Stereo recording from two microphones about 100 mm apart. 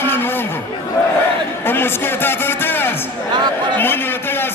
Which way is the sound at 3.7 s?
20° left (ahead or behind).